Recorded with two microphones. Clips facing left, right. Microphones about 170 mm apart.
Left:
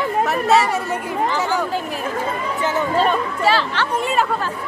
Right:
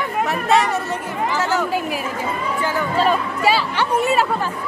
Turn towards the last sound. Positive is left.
turn(degrees=-10)  # may be behind; listen again after turning